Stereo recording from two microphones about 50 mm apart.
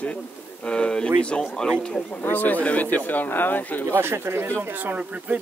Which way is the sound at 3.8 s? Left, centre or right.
Right.